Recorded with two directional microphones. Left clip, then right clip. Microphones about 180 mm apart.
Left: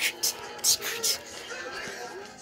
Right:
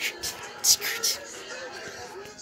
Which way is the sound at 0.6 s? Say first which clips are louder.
Right 4 dB; 15° right (ahead or behind).